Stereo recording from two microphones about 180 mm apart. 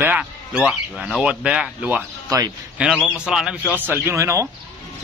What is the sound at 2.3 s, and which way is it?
Speech, 20° right (ahead or behind).